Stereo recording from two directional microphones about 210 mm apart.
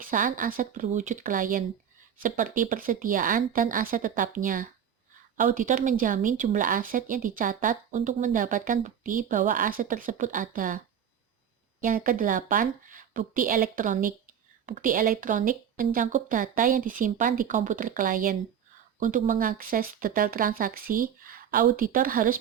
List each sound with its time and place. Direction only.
0.0 s speech: 40° right (ahead or behind)
11.8 s speech: 40° right (ahead or behind)